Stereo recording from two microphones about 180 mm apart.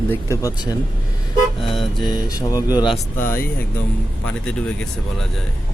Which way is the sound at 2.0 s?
25° left (ahead or behind).